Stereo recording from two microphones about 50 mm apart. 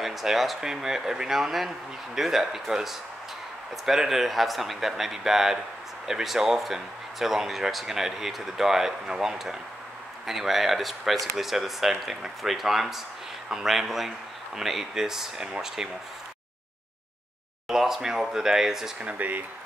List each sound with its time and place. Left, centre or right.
0.0 s speech: centre
17.6 s speech: centre
18.9 s speech: right